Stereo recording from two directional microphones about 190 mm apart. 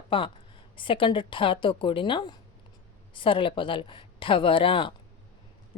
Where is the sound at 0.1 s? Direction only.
25° left (ahead or behind).